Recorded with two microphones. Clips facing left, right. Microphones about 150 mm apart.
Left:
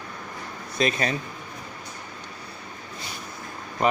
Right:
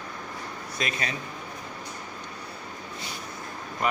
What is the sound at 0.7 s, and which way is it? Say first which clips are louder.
Speech: left 8 dB; 35° left (ahead or behind).